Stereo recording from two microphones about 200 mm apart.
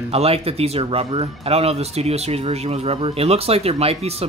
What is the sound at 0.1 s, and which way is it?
Speech, 30° right (ahead or behind).